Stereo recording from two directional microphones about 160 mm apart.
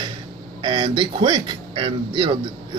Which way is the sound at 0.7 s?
30° right (ahead or behind).